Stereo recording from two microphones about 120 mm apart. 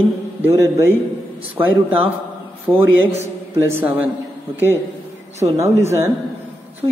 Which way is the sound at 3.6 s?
20° right (ahead or behind).